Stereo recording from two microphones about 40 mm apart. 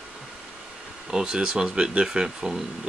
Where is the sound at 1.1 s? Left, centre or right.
Centre.